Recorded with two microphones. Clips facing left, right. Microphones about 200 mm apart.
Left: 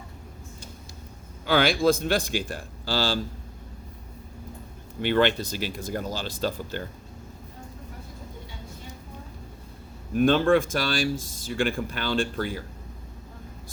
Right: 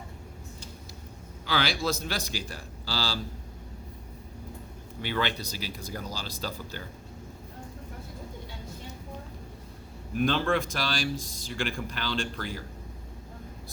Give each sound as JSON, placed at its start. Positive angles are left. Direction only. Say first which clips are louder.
{"t": 1.5, "sound": "speech", "louder": "left 8 dB", "side_deg": 50}
{"t": 4.9, "sound": "speech", "louder": "left 8 dB", "side_deg": 55}
{"t": 10.2, "sound": "speech", "louder": "left 7 dB", "side_deg": 50}